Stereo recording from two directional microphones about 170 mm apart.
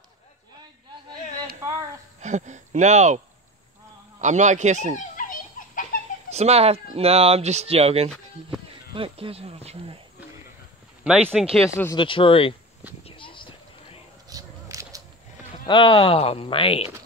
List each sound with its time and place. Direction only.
2.2 s speech: 45° right (ahead or behind)
4.2 s a man's voice: 45° right (ahead or behind)
5.1 s a sound: 50° left (ahead or behind)
6.3 s speech: 40° right (ahead or behind)
11.1 s speech: 5° right (ahead or behind)
11.7 s speech: 20° left (ahead or behind)
12.0 s speech: 30° left (ahead or behind)
13.0 s a sound: 30° left (ahead or behind)
14.3 s a sound: 20° right (ahead or behind)
15.6 s speech: 30° left (ahead or behind)